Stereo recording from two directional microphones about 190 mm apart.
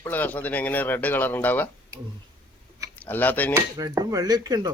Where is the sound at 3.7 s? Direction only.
20° right (ahead or behind).